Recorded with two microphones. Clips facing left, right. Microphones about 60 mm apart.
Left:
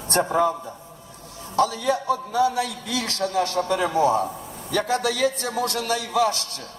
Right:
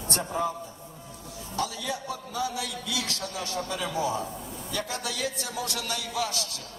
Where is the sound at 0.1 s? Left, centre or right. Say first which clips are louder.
Left 9 dB; left.